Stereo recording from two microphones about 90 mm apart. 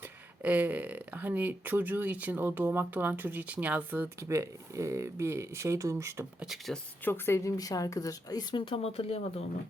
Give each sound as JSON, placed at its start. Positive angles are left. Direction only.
{"t": 0.0, "sound": "speech", "side_deg": -20}
{"t": 4.2, "sound": "speech", "side_deg": -35}
{"t": 6.4, "sound": "speech", "side_deg": 0}
{"t": 7.0, "sound": "speech", "side_deg": 25}
{"t": 7.5, "sound": "speech", "side_deg": 40}
{"t": 8.5, "sound": "speech", "side_deg": 80}